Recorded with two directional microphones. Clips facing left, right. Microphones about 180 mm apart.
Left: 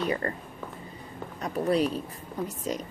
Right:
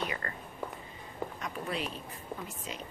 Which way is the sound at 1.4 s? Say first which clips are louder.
Left 14 dB; 40° left (ahead or behind).